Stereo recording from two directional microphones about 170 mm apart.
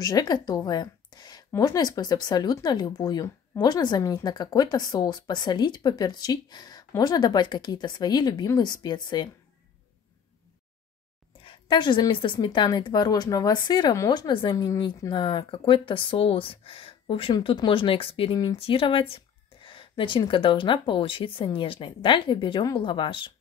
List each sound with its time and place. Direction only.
0.0 s a woman's voice: 20° left (ahead or behind)
11.4 s speech: 30° left (ahead or behind)